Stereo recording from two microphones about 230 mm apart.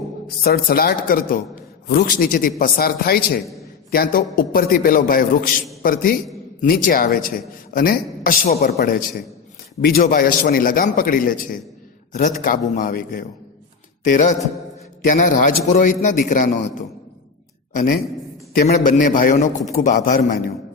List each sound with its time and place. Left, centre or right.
0.4 s a man's voice: left
18.5 s a man's voice: left